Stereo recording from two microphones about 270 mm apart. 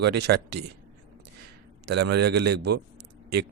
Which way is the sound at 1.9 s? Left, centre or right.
Right.